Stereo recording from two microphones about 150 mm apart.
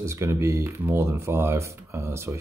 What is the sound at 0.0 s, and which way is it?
Speech, 20° right (ahead or behind).